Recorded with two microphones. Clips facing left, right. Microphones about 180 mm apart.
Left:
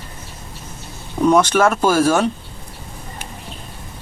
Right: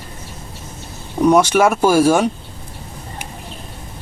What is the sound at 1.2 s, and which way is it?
Speech, 10° right (ahead or behind).